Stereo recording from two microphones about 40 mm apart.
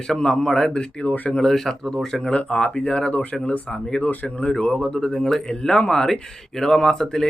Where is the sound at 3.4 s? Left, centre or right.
Left.